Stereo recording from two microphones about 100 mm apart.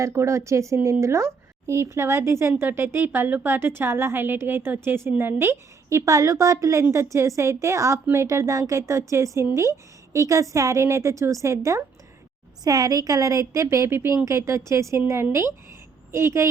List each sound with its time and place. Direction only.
0.0 s a woman's voice: 30° right (ahead or behind)